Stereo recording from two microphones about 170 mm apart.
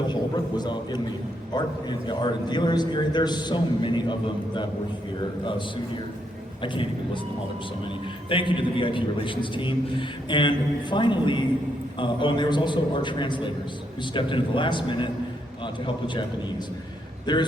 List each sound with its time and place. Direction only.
0.1 s a man's voice: 25° left (ahead or behind)
8.3 s a man's voice: 30° left (ahead or behind)
17.3 s a man's voice: 25° left (ahead or behind)